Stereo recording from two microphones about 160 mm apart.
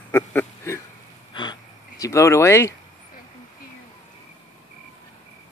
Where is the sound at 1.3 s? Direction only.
25° left (ahead or behind).